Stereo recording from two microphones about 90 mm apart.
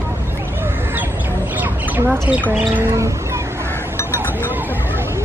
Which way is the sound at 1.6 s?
15° right (ahead or behind).